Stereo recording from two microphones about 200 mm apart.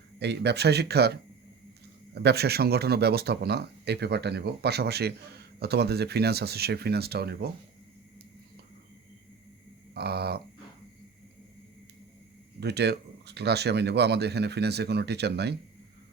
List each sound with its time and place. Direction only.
0.2 s speech: 55° right (ahead or behind)
9.9 s speech: 55° right (ahead or behind)
12.5 s speech: 55° right (ahead or behind)